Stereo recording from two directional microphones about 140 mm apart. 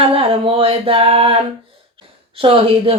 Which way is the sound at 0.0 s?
40° right (ahead or behind).